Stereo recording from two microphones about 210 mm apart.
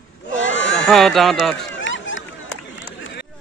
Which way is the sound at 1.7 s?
60° left (ahead or behind).